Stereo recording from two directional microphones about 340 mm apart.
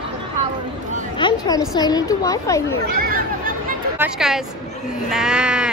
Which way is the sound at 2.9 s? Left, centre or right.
Right.